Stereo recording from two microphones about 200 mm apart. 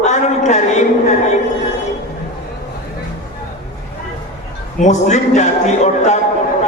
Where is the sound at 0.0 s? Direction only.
35° left (ahead or behind).